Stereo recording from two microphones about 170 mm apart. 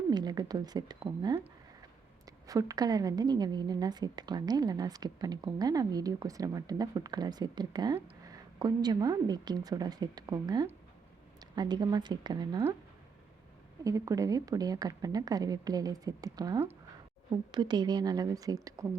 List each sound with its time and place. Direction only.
0.1 s a woman's voice: 25° right (ahead or behind)
13.8 s a woman's voice: 20° right (ahead or behind)